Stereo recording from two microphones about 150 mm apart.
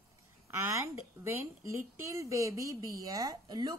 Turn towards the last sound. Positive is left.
turn(degrees=-25)  # may be behind; listen again after turning